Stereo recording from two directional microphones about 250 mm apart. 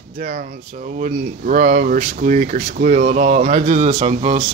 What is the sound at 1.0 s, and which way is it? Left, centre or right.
Speech, right.